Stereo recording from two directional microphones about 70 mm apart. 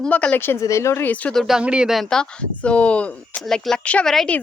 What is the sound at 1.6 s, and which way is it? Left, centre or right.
Speech, centre.